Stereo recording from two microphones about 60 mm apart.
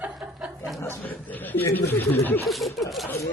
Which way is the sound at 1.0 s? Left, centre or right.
Left.